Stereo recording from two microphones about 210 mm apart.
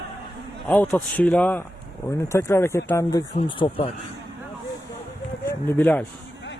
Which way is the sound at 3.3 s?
25° left (ahead or behind).